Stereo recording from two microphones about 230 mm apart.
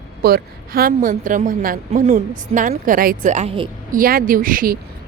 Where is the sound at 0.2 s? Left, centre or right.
Right.